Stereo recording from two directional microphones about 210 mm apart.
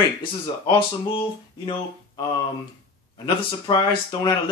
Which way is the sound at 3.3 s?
20° left (ahead or behind).